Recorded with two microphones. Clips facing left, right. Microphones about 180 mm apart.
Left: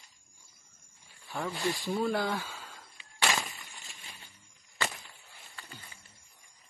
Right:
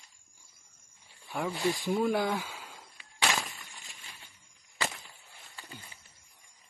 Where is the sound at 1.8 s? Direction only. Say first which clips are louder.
Right 2 dB; centre (ahead or behind).